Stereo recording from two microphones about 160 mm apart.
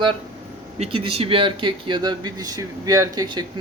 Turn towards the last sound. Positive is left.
turn(degrees=-25)  # may be behind; listen again after turning